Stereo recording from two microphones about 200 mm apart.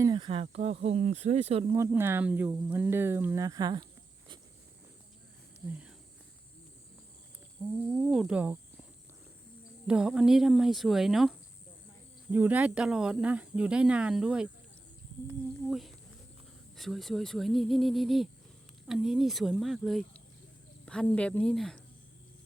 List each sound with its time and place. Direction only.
0.0 s speech: 25° right (ahead or behind)
1.7 s speech: 15° right (ahead or behind)
5.6 s speech: 5° right (ahead or behind)
7.6 s speech: 5° right (ahead or behind)
9.8 s speech: 5° right (ahead or behind)
15.6 s speech: centre (ahead or behind)